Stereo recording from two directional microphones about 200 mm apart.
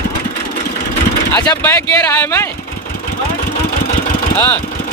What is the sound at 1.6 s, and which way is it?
Speech, 10° left (ahead or behind).